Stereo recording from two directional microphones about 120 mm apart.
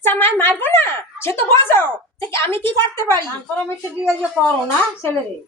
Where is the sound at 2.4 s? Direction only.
20° left (ahead or behind).